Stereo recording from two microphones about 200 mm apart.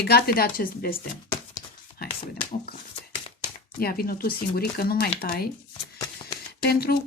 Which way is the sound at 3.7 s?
50° left (ahead or behind).